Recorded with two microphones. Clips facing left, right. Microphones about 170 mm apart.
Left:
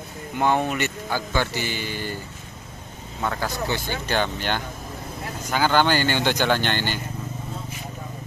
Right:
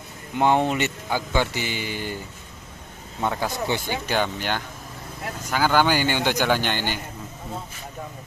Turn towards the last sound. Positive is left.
turn(degrees=-10)  # may be behind; listen again after turning